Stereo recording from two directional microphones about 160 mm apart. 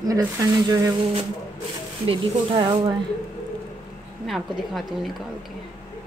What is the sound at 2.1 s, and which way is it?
Speech, 30° right (ahead or behind).